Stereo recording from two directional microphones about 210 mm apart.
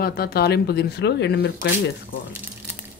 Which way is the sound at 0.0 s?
50° left (ahead or behind).